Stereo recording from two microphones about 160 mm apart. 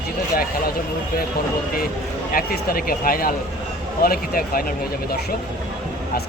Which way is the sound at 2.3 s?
65° left (ahead or behind).